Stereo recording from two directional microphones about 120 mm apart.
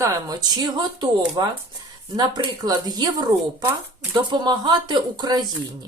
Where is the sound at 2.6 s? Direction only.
35° right (ahead or behind).